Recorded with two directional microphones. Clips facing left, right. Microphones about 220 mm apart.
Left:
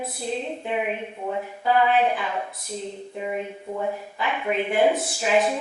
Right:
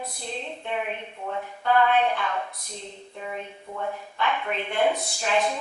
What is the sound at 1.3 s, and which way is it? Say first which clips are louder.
Speech: left 2 dB; 10° left (ahead or behind).